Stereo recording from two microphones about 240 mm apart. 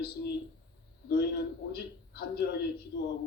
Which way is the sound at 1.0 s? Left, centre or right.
Left.